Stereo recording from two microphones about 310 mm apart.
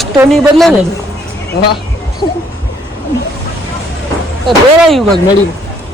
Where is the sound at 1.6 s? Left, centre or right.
Left.